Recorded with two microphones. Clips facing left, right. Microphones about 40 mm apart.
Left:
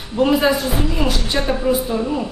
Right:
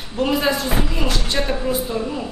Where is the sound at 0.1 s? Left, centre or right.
Centre.